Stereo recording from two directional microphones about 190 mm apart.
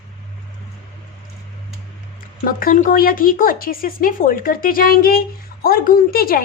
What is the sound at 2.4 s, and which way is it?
A woman's voice, 45° left (ahead or behind).